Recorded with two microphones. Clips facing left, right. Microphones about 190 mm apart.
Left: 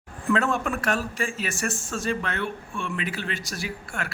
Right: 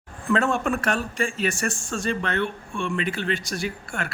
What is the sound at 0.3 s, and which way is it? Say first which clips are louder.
A man's voice: right 4 dB; centre (ahead or behind).